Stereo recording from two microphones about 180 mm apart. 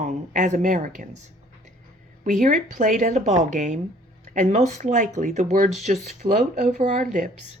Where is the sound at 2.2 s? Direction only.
45° right (ahead or behind).